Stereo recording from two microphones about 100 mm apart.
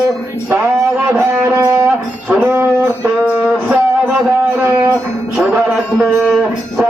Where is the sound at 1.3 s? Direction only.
25° right (ahead or behind).